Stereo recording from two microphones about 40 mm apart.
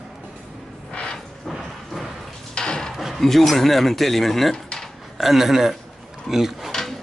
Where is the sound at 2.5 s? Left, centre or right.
Left.